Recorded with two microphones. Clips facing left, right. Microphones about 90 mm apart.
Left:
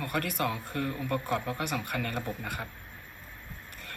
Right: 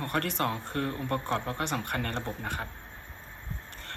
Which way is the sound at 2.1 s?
35° right (ahead or behind).